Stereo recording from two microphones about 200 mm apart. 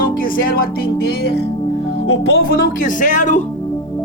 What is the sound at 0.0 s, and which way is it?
Speech, 45° left (ahead or behind).